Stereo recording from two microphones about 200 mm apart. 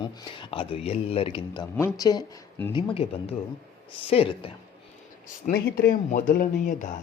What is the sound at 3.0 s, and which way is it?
Speech, 25° left (ahead or behind).